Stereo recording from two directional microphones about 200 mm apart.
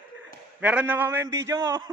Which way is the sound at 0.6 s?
5° right (ahead or behind).